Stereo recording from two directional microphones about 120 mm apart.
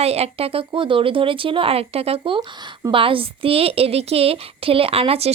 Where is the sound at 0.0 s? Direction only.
60° right (ahead or behind).